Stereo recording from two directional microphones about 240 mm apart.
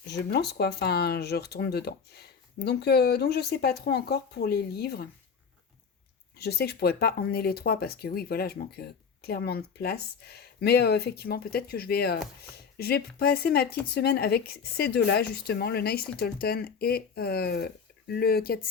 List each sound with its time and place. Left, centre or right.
0.1 s speech: left
6.3 s speech: left